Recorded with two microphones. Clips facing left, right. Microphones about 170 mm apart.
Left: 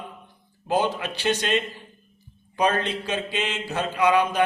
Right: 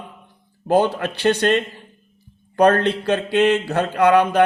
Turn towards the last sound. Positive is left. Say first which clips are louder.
# right 6 dB
turn(degrees=-60)  # may be behind; listen again after turning